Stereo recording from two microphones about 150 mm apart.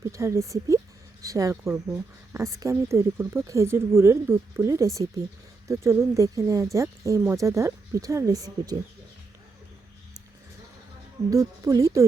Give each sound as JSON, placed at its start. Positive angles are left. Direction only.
{"t": 0.0, "sound": "speech", "side_deg": -20}
{"t": 11.3, "sound": "speech", "side_deg": -20}